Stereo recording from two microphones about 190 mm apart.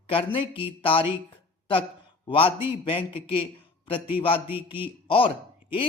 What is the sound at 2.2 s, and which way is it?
A man's voice, 30° left (ahead or behind).